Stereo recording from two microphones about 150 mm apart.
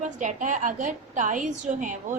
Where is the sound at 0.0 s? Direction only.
60° right (ahead or behind).